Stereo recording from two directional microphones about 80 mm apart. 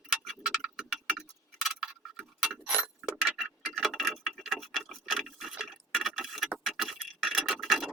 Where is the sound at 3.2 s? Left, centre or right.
Centre.